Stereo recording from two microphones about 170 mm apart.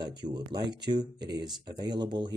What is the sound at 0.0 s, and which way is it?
Speech, 25° right (ahead or behind).